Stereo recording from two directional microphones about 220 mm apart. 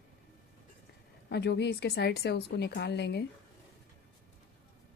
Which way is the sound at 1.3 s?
50° left (ahead or behind).